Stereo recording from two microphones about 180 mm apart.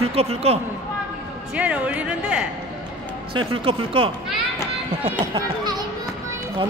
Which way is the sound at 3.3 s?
30° right (ahead or behind).